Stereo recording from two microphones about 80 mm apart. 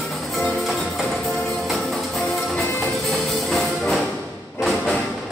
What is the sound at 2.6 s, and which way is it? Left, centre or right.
Music, left.